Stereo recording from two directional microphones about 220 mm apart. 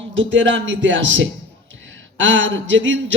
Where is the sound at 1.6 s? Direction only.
60° right (ahead or behind).